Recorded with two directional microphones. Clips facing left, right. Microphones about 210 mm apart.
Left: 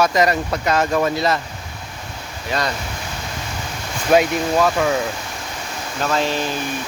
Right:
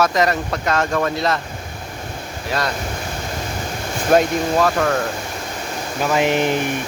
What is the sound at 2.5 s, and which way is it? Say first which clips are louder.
Speech: even; centre (ahead or behind).